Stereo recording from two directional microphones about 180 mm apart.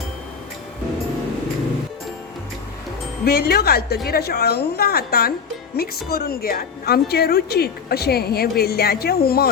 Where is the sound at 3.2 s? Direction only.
60° left (ahead or behind).